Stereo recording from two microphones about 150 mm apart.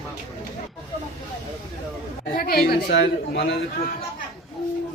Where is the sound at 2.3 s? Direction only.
85° left.